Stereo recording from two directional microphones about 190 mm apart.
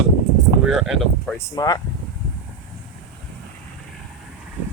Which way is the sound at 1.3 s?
20° left (ahead or behind).